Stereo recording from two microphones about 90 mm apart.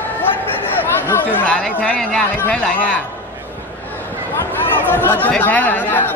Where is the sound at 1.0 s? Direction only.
20° left (ahead or behind).